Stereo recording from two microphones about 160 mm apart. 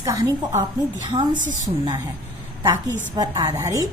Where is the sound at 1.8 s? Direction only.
25° right (ahead or behind).